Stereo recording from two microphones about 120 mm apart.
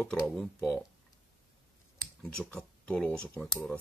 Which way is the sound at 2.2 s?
5° left (ahead or behind).